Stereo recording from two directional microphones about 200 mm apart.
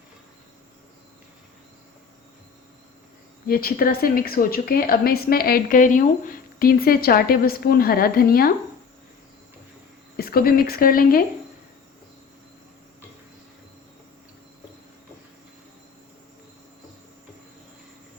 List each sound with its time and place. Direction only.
3.5 s a woman's voice: 45° left (ahead or behind)
10.2 s a woman's voice: 50° left (ahead or behind)